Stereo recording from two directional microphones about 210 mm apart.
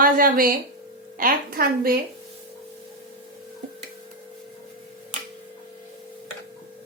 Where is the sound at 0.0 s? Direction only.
45° right (ahead or behind).